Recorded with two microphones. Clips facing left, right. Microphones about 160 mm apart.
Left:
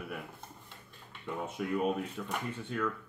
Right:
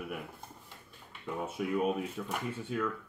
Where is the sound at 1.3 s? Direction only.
5° right (ahead or behind).